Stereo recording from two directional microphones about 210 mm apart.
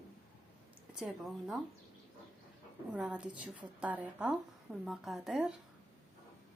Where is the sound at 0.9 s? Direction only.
Centre (ahead or behind).